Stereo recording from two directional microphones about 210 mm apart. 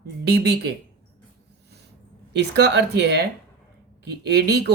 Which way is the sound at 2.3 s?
55° right (ahead or behind).